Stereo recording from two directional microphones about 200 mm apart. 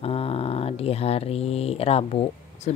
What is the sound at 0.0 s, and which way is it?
Speech, 30° left (ahead or behind).